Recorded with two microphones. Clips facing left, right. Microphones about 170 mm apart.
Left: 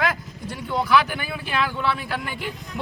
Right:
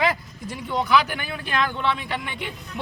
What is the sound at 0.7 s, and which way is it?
Speech, centre (ahead or behind).